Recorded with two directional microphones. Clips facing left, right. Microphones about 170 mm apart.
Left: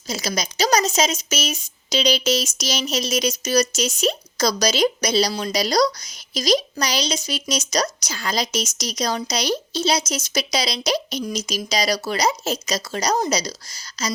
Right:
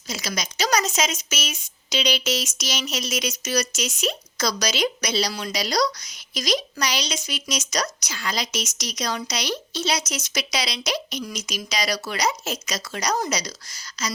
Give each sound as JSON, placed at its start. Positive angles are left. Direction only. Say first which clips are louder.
{"t": 0.1, "sound": "speech", "louder": "left 4 dB", "side_deg": 35}